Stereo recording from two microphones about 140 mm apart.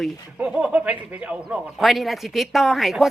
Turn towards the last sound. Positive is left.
turn(degrees=0)  # may be behind; listen again after turning